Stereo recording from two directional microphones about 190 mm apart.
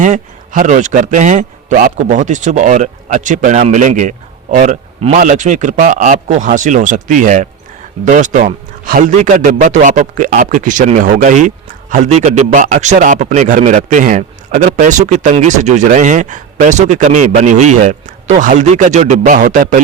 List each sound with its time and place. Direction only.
0.0 s a man's voice: 40° right (ahead or behind)